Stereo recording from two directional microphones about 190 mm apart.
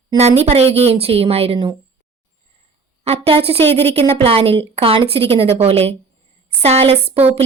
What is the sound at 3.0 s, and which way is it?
A woman's voice, 30° right (ahead or behind).